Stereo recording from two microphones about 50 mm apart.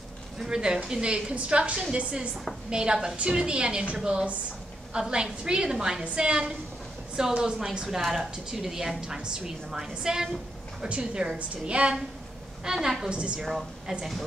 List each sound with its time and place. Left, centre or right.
0.5 s a woman's voice: centre
8.0 s a woman's voice: centre
8.5 s a woman's voice: centre
12.7 s a woman's voice: centre
13.1 s a woman's voice: right
13.4 s a woman's voice: centre